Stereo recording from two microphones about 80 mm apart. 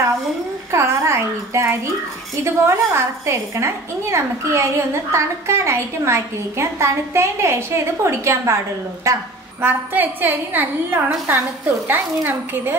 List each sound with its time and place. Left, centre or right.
0.7 s a sound: right
2.3 s a woman's voice: right
9.6 s a woman's voice: right